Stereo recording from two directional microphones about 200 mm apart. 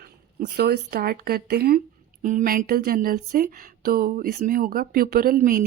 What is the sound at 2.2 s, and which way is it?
Speech, 40° right (ahead or behind).